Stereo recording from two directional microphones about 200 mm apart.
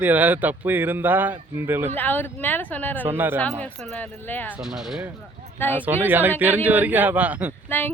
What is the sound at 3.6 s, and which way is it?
Speech, 5° left (ahead or behind).